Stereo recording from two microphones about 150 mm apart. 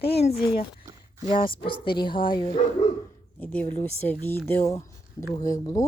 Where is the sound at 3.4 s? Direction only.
10° left (ahead or behind).